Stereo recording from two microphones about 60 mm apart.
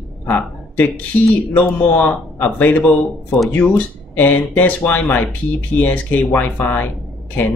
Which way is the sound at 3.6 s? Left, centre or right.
Left.